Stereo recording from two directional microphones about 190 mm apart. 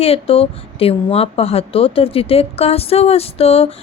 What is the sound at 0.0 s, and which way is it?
Speech, 30° left (ahead or behind).